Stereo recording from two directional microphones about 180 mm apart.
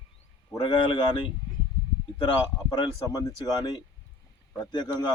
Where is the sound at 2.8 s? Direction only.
20° left (ahead or behind).